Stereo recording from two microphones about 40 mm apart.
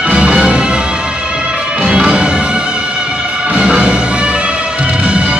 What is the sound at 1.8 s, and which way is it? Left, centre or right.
Music, right.